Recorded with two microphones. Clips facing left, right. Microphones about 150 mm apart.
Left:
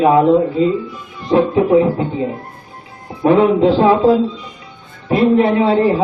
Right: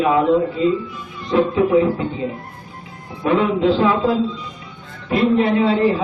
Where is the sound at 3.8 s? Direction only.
25° left (ahead or behind).